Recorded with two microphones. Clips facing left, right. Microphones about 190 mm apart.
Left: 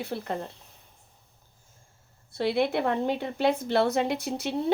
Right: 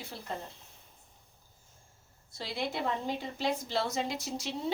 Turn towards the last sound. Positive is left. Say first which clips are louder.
# left 8 dB
turn(degrees=60)  # may be behind; listen again after turning